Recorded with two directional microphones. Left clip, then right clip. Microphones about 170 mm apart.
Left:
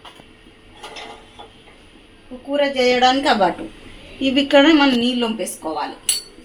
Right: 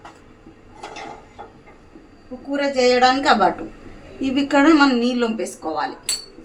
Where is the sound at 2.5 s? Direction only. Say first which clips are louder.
Left 1 dB; 25° left (ahead or behind).